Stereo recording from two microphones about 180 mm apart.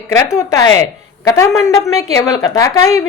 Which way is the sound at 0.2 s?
20° left (ahead or behind).